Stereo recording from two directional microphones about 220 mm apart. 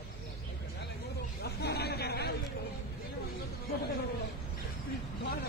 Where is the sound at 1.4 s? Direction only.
45° left (ahead or behind).